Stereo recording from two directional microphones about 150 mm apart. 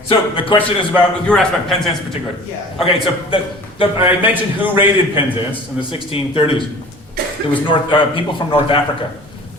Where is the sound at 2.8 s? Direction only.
35° left (ahead or behind).